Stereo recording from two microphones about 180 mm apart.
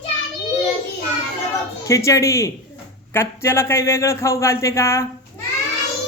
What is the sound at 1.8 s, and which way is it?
Speech, 15° left (ahead or behind).